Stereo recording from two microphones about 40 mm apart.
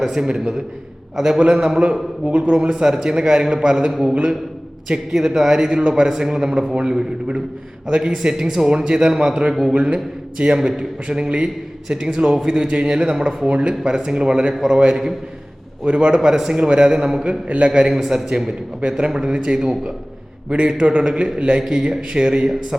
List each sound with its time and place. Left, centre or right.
0.0 s a man's voice: centre
9.5 s a man's voice: centre
9.7 s a man's voice: right
17.7 s a man's voice: centre
18.0 s a man's voice: centre
18.3 s a man's voice: centre